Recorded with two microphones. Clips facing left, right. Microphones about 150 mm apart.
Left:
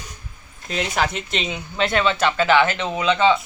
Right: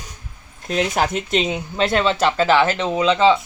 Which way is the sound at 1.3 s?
45° right (ahead or behind).